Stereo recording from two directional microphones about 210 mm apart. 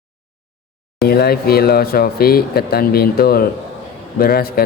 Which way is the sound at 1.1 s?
45° left (ahead or behind).